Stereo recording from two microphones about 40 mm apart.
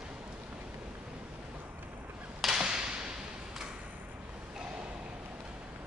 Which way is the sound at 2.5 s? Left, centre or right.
Right.